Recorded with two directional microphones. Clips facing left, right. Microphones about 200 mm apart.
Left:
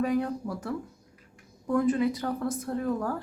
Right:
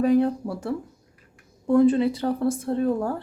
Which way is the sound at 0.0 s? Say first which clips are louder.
Right 7 dB; 30° right (ahead or behind).